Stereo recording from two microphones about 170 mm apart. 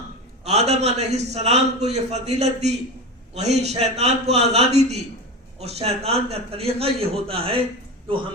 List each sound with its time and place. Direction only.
0.4 s a man's voice: 40° right (ahead or behind)